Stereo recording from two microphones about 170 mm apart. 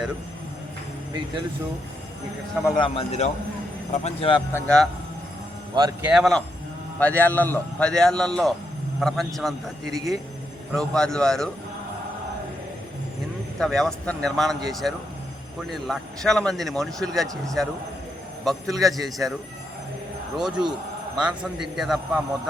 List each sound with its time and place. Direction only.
2.6 s a man's voice: 30° left (ahead or behind)
4.5 s a man's voice: 5° left (ahead or behind)
6.0 s a man's voice: 5° right (ahead or behind)
7.0 s a man's voice: 10° left (ahead or behind)
13.6 s a man's voice: centre (ahead or behind)
20.3 s a man's voice: 5° right (ahead or behind)